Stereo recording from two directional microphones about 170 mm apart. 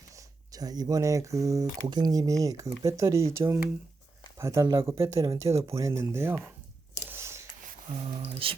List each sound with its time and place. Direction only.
0.1 s speech: 20° right (ahead or behind)
7.1 s scissors: 15° right (ahead or behind)
7.9 s speech: 30° right (ahead or behind)